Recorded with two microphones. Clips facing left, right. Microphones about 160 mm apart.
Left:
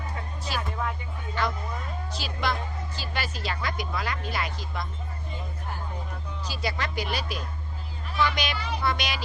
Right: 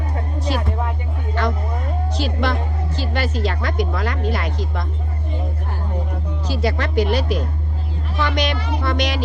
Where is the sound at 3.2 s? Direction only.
10° left (ahead or behind).